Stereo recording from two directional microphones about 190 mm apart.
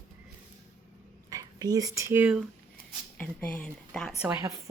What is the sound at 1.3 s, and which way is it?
Speech, 20° right (ahead or behind).